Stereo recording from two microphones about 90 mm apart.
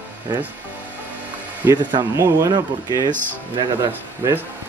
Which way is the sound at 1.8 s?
55° right (ahead or behind).